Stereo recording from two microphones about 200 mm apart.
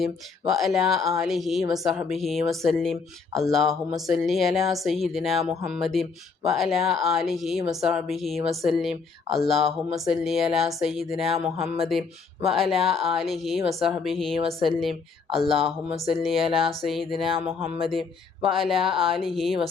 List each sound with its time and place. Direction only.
0.0 s speech: centre (ahead or behind)
11.5 s a sound: 30° right (ahead or behind)
12.5 s speech: centre (ahead or behind)
18.5 s speech: centre (ahead or behind)
18.9 s a sound: 25° right (ahead or behind)
19.1 s speech: centre (ahead or behind)